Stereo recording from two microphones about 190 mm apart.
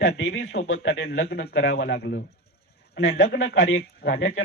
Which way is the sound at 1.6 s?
75° left (ahead or behind).